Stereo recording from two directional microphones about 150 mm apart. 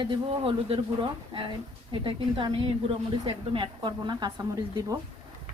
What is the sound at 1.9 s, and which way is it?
A woman's voice, 35° right (ahead or behind).